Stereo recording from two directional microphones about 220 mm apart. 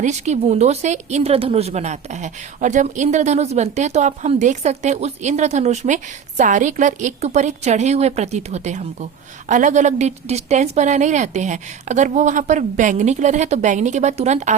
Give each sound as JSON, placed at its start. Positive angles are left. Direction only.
{"t": 0.0, "sound": "speech", "side_deg": -30}